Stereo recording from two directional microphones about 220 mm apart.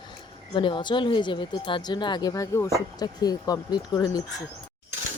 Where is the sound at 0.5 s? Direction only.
20° left (ahead or behind).